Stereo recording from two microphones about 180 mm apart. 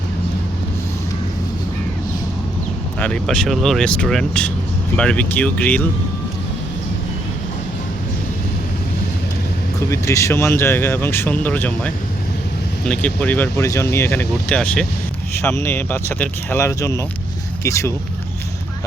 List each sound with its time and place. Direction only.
3.0 s speech: 5° left (ahead or behind)
9.9 s speech: 15° left (ahead or behind)